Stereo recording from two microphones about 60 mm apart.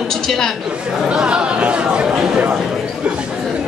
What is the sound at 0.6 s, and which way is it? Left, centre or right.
Speech, centre.